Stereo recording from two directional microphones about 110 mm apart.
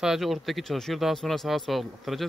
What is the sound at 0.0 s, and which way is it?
Speech, 5° right (ahead or behind).